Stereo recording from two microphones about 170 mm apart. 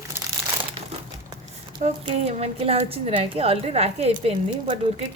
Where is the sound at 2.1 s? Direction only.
35° right (ahead or behind).